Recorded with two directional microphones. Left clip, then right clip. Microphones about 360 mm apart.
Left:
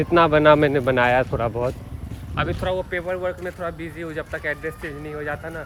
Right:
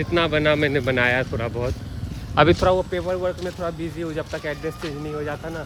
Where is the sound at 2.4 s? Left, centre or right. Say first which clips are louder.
Right 7 dB; centre.